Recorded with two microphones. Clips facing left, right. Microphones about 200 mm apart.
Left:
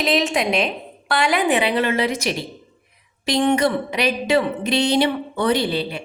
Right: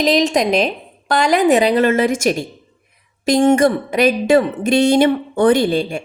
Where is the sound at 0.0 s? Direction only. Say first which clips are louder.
Right 5 dB; 40° right (ahead or behind).